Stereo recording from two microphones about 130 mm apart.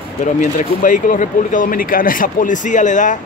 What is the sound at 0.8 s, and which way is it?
Speech, 85° left.